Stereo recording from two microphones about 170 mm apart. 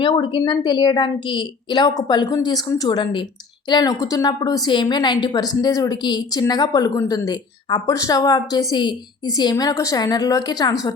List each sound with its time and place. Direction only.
0.0 s a woman's voice: 25° left (ahead or behind)